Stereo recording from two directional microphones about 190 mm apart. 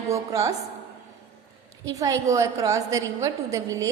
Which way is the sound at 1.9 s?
15° right (ahead or behind).